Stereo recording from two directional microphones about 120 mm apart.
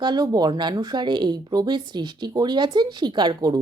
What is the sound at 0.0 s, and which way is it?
Speech, 35° right (ahead or behind).